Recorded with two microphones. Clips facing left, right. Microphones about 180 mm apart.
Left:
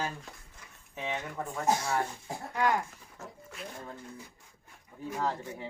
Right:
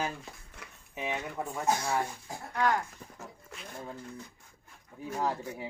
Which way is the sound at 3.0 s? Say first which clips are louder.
Right 7 dB; 50° right (ahead or behind).